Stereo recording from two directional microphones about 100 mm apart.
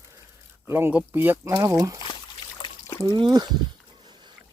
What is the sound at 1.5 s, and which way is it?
Speech, 35° right (ahead or behind).